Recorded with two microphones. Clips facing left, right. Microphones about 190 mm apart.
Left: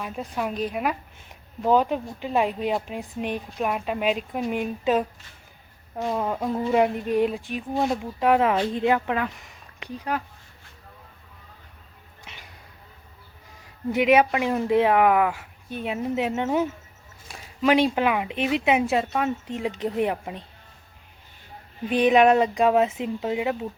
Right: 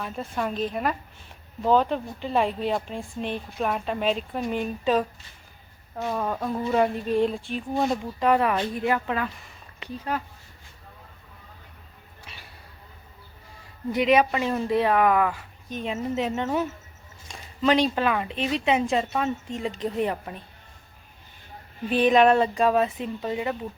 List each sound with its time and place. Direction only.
0.0 s speech: 5° left (ahead or behind)
8.3 s speech: 15° left (ahead or behind)
12.2 s a sound: 20° left (ahead or behind)
13.9 s speech: 10° left (ahead or behind)
21.8 s speech: 15° left (ahead or behind)